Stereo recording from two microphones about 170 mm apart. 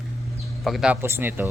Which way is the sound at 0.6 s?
Centre (ahead or behind).